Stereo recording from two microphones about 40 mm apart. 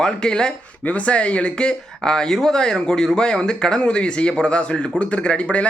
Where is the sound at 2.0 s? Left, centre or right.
Centre.